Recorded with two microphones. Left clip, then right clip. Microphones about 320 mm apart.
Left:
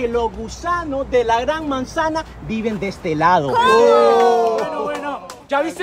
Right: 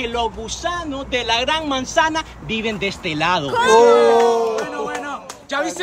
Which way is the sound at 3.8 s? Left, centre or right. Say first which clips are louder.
Even; centre.